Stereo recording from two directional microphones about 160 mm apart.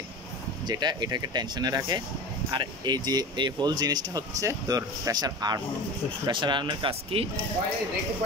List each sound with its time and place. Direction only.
0.7 s speech: 25° right (ahead or behind)